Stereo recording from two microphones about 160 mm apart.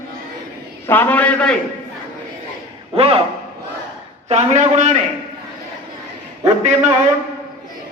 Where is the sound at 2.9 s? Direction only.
35° right (ahead or behind).